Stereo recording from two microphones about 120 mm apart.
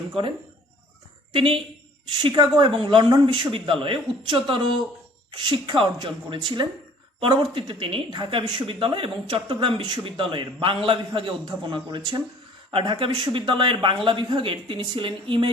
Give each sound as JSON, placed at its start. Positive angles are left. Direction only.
{"t": 0.1, "sound": "a woman's voice", "side_deg": -45}